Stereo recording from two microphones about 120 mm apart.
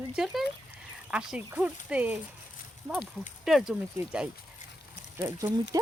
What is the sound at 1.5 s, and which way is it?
Speech, 15° right (ahead or behind).